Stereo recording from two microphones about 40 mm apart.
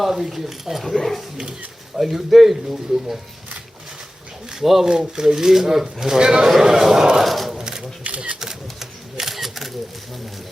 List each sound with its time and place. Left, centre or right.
0.0 s speech: centre
0.9 s speech: centre
2.0 s speech: centre
4.5 s speech: centre
6.1 s a man's voice: centre
6.5 s speech: centre
7.3 s speech: centre
7.5 s a sound: centre
8.0 s typewriter: right
8.4 s typewriter: centre